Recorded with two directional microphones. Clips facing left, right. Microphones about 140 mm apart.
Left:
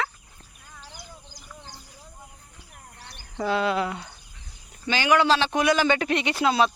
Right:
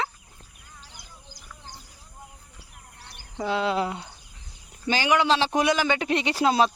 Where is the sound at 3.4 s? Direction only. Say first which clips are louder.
Left 1 dB; 20° right (ahead or behind).